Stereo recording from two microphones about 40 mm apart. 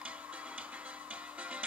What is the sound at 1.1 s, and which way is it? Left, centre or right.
Music, right.